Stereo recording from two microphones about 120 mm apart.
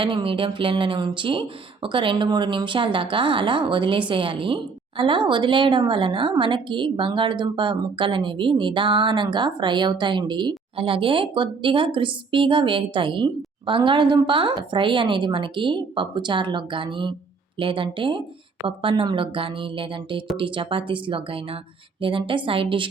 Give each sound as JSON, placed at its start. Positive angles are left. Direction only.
{"t": 0.0, "sound": "a woman's voice", "side_deg": -45}